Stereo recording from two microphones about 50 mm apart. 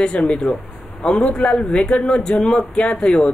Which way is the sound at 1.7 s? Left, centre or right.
Centre.